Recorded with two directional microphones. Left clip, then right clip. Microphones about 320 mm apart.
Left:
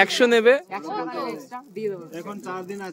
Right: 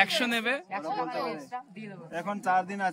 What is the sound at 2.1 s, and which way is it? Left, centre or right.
Speech, centre.